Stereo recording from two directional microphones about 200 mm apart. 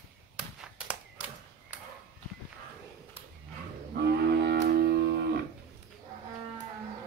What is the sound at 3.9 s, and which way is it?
Livestock, 55° right (ahead or behind).